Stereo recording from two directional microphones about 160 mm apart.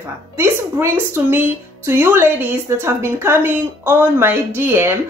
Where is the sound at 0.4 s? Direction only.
15° right (ahead or behind).